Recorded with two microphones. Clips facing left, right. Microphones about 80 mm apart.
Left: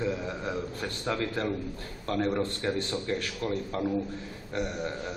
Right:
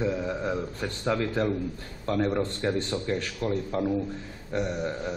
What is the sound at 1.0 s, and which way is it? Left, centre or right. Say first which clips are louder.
A man's voice: right 4 dB; centre.